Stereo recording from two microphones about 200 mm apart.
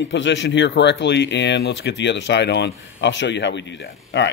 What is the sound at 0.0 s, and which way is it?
Speech, 65° left (ahead or behind).